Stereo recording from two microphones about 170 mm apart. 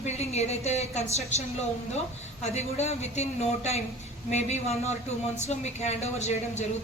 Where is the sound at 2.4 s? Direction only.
40° left (ahead or behind).